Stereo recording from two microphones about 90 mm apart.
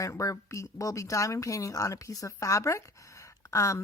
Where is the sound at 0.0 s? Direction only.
35° left (ahead or behind).